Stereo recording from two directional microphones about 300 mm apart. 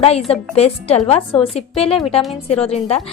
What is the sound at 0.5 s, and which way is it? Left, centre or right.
A woman's voice, left.